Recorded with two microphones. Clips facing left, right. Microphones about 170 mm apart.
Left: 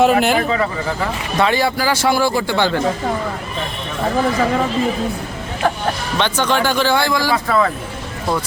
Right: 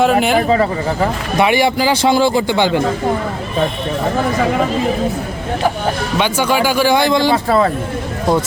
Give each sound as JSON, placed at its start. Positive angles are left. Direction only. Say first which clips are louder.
{"t": 0.0, "sound": "a man's voice", "louder": "right 1 dB", "side_deg": 0}
{"t": 0.4, "sound": "speech", "louder": "right 5 dB", "side_deg": -35}
{"t": 1.4, "sound": "a man's voice", "louder": "right 3 dB", "side_deg": -15}
{"t": 6.1, "sound": "a man's voice", "louder": "right 2 dB", "side_deg": -10}
{"t": 7.4, "sound": "speech", "louder": "right 3 dB", "side_deg": -35}